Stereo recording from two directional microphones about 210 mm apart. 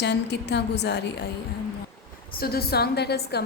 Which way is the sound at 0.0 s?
55° left (ahead or behind).